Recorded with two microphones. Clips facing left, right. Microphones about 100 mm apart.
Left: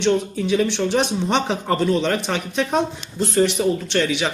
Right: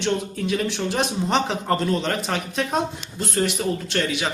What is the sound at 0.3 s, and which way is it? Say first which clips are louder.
Speech: left 5 dB; centre (ahead or behind).